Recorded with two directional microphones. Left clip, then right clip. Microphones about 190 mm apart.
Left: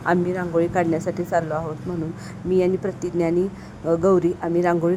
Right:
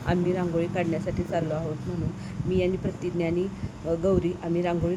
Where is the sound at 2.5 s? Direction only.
20° left (ahead or behind).